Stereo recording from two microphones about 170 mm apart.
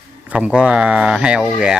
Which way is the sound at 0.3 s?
5° right (ahead or behind).